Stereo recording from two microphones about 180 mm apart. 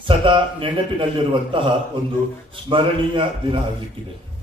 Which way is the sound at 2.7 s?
30° right (ahead or behind).